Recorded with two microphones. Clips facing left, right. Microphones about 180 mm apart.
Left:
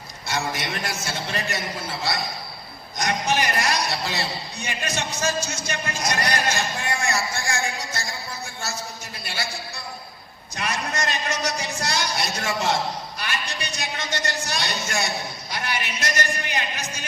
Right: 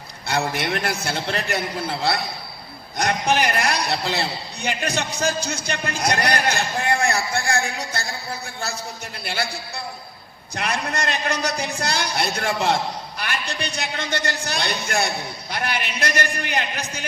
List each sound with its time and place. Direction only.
0.3 s a man's voice: 60° right (ahead or behind)